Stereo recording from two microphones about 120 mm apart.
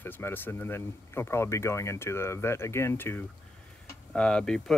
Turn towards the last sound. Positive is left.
turn(degrees=5)  # may be behind; listen again after turning